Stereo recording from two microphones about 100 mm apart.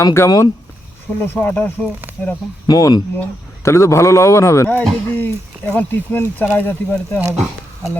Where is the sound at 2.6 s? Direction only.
40° left (ahead or behind); by 6.7 s 20° left (ahead or behind).